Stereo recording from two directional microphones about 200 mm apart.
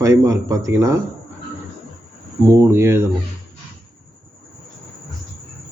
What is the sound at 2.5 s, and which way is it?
Speech, 15° right (ahead or behind).